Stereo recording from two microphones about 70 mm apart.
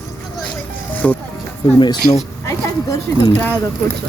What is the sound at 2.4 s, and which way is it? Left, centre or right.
Speech, left.